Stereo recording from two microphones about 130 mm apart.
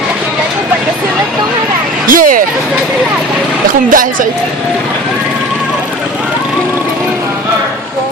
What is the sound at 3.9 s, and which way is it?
Speech, 90° right.